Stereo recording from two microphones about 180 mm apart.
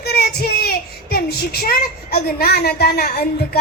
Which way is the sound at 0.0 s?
60° left (ahead or behind).